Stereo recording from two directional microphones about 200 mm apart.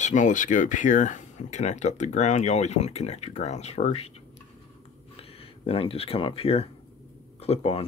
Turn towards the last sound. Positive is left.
turn(degrees=30)  # may be behind; listen again after turning